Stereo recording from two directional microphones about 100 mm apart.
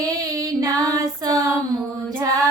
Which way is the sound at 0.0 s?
35° right (ahead or behind).